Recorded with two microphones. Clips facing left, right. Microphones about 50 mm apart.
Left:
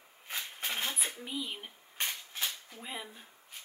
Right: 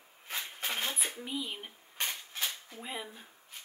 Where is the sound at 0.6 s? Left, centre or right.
Centre.